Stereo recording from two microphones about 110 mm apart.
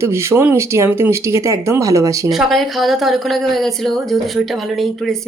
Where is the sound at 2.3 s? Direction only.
Centre (ahead or behind).